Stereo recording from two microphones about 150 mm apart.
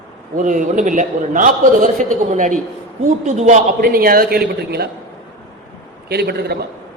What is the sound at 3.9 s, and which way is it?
A woman's voice, 75° right (ahead or behind).